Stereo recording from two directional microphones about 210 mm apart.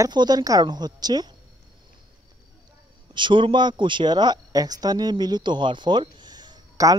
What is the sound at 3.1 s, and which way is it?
Speech, 25° right (ahead or behind).